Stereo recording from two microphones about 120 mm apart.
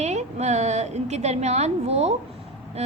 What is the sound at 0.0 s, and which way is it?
A woman's voice, 70° right (ahead or behind).